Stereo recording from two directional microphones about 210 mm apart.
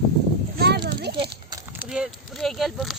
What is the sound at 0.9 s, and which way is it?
Speech, 50° right (ahead or behind).